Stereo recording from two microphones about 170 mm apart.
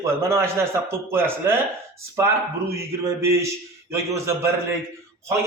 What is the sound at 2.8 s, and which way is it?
Speech, 15° right (ahead or behind).